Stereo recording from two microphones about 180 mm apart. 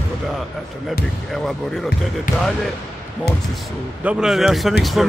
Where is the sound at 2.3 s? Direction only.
50° left (ahead or behind).